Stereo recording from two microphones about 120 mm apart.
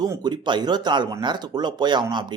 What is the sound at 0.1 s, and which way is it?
Speech, 35° right (ahead or behind).